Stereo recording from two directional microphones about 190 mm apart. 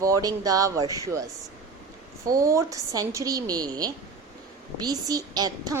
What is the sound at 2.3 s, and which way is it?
Speech, 15° right (ahead or behind).